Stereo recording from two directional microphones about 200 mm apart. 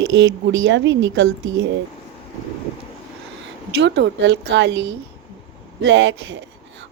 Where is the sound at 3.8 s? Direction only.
60° right (ahead or behind).